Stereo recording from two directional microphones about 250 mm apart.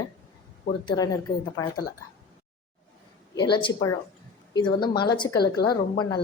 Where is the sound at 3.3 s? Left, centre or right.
Centre.